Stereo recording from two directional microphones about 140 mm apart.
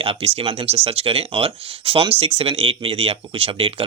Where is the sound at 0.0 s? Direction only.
40° right (ahead or behind).